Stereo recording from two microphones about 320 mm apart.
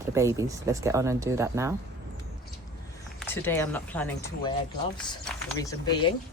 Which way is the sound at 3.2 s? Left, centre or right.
Centre.